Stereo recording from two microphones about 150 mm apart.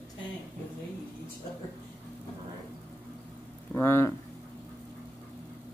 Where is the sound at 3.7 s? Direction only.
15° left (ahead or behind).